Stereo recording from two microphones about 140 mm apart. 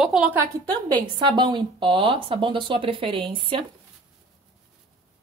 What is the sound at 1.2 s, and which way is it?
Speech, 35° right (ahead or behind).